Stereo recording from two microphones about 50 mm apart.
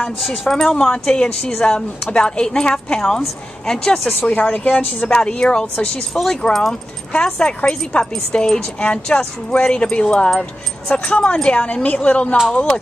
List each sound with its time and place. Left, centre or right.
0.5 s a woman's voice: centre
4.3 s a woman's voice: left